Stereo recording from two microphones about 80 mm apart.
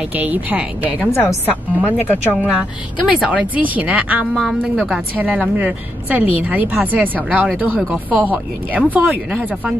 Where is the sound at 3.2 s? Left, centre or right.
Centre.